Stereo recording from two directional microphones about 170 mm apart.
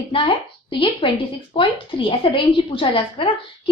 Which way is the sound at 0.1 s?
30° left (ahead or behind).